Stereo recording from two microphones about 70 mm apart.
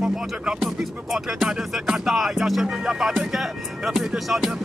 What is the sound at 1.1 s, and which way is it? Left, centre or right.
Speech, centre.